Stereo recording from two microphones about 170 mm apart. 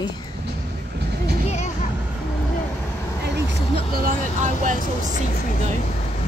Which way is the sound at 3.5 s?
65° right (ahead or behind).